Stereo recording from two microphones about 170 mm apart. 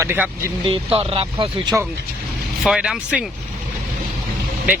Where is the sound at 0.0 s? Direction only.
15° right (ahead or behind).